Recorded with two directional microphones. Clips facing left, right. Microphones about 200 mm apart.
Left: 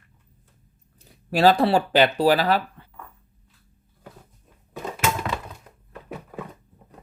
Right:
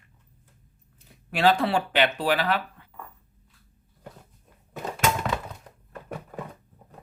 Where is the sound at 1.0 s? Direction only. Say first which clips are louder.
Left 4 dB; 35° left (ahead or behind).